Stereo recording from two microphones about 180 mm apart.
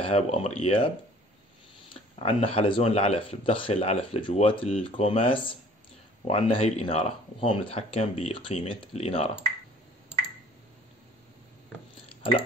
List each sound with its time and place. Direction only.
0.0 s speech: 35° left (ahead or behind)
2.0 s speech: 30° left (ahead or behind)
12.2 s speech: 30° left (ahead or behind)